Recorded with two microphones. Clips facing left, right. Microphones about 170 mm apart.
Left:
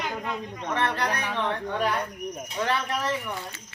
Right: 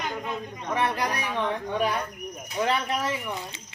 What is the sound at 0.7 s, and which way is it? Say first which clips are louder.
Speech: even; 10° right (ahead or behind).